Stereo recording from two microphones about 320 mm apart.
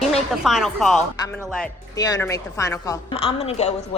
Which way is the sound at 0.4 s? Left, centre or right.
Centre.